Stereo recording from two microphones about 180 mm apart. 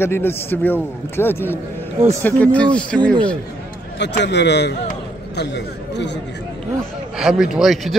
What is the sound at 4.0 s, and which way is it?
A man's voice, 70° left (ahead or behind).